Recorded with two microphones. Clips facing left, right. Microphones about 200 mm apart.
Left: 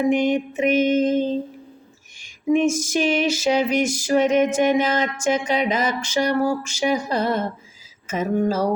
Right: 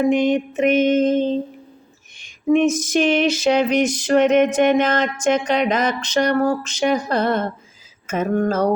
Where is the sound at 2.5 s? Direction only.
10° left (ahead or behind).